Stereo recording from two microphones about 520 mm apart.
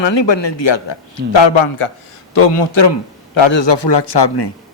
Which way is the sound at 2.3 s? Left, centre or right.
Left.